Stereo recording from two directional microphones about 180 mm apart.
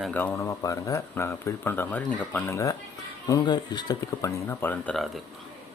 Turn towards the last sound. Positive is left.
turn(degrees=5)  # may be behind; listen again after turning